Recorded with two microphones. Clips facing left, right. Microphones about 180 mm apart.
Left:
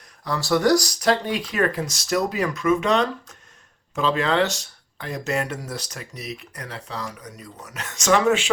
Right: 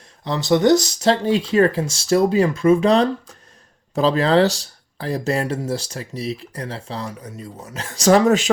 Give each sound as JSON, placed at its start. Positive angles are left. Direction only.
{"t": 0.3, "sound": "speech", "side_deg": -20}